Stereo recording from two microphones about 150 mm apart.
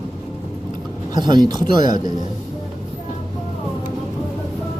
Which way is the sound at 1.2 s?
30° right (ahead or behind).